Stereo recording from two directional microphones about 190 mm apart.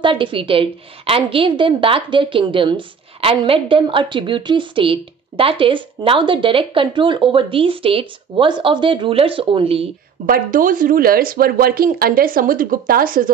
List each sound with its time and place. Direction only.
0.0 s a woman's voice: 25° right (ahead or behind)
10.2 s speech: 45° right (ahead or behind)